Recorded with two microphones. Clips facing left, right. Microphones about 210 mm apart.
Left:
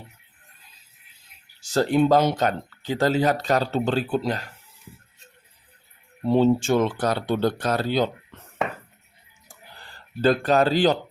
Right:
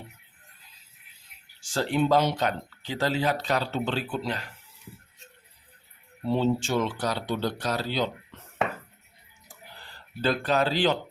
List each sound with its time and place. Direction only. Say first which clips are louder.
1.6 s speech: left 6 dB; 40° left (ahead or behind)
6.2 s speech: left 6 dB; 50° left (ahead or behind)
10.2 s speech: left 6 dB; 45° left (ahead or behind)